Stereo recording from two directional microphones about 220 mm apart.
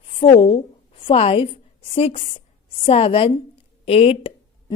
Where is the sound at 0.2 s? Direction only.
25° left (ahead or behind).